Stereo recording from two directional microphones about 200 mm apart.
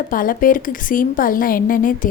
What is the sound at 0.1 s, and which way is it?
A woman's voice, 45° left (ahead or behind).